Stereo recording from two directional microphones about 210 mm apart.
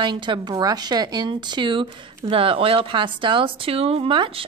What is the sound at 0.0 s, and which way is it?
A woman's voice, 20° right (ahead or behind).